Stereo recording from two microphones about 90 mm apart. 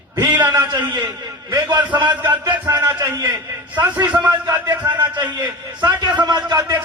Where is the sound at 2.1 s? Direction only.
20° right (ahead or behind).